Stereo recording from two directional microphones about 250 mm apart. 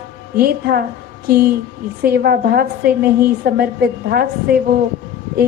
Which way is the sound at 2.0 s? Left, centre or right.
Right.